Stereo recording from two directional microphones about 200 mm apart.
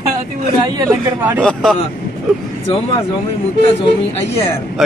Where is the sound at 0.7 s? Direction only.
15° right (ahead or behind).